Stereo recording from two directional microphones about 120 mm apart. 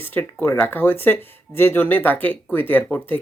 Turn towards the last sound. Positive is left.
turn(degrees=15)  # may be behind; listen again after turning